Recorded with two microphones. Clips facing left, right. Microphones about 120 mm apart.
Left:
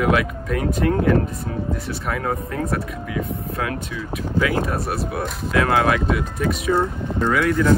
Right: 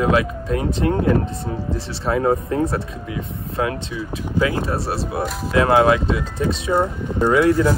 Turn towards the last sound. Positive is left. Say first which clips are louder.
# right 4 dB
turn(degrees=-25)  # may be behind; listen again after turning